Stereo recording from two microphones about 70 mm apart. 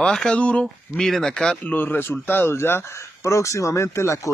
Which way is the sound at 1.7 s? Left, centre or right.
Left.